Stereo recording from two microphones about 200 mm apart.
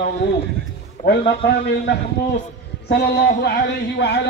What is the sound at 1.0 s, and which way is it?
A man's voice, 50° left (ahead or behind).